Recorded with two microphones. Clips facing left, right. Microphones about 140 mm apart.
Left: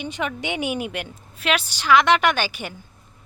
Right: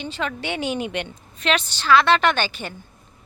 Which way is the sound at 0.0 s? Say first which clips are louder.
Even; 15° left (ahead or behind).